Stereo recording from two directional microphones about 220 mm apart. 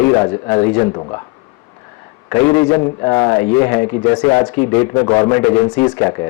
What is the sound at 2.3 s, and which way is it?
A man's voice, 10° left (ahead or behind).